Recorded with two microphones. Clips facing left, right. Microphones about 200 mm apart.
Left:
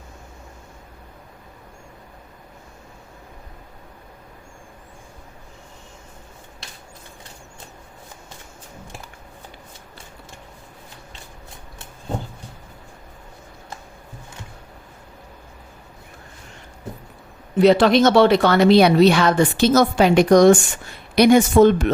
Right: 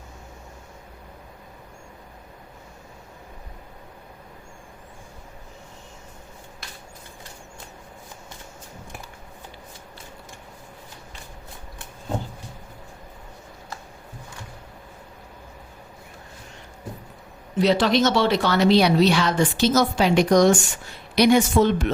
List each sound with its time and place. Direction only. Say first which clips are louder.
17.6 s speech: left 5 dB; 55° left (ahead or behind)